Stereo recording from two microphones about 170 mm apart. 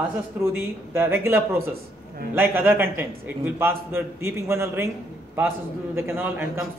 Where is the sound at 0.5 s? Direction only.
15° right (ahead or behind).